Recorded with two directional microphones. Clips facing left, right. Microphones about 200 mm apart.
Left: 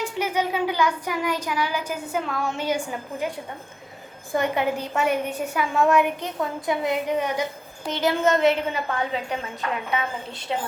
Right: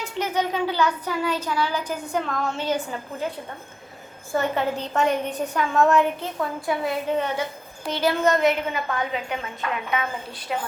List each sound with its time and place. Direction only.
0.0 s a sound: 10° left (ahead or behind)
7.9 s a woman's voice: 20° left (ahead or behind)
10.5 s a woman's voice: 25° left (ahead or behind)